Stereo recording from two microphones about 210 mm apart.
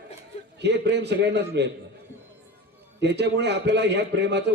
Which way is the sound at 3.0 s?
55° right (ahead or behind).